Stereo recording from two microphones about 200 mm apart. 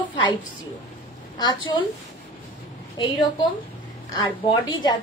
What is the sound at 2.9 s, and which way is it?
Speech, 25° left (ahead or behind).